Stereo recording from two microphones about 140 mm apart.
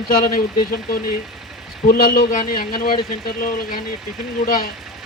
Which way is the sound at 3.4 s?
80° left.